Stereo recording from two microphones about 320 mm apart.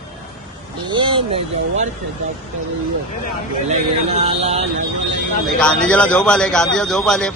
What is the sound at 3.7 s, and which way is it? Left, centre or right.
Speech, centre.